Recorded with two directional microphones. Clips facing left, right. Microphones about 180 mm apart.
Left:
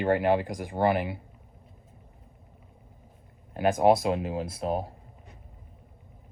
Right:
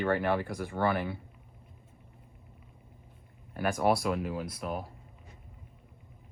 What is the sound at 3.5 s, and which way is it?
Speech, 20° left (ahead or behind).